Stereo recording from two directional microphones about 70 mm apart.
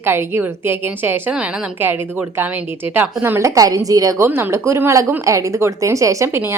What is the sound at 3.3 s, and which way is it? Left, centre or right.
Speech, right.